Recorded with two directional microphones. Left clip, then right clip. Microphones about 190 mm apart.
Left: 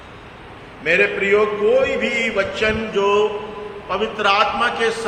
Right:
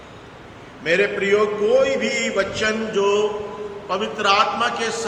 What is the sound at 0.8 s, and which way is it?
A man's voice, 15° right (ahead or behind).